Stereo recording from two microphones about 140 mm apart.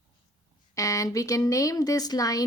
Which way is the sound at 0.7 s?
25° left (ahead or behind).